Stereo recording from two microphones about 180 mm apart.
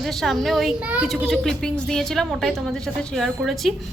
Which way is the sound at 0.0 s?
Centre (ahead or behind).